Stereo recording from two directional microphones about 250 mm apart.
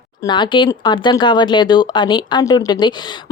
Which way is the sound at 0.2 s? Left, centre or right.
Centre.